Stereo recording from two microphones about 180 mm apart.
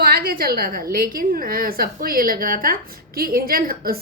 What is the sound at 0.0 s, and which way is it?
A woman's voice, 60° right (ahead or behind).